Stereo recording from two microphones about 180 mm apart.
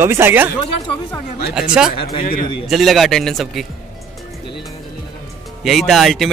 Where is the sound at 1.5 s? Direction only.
5° right (ahead or behind).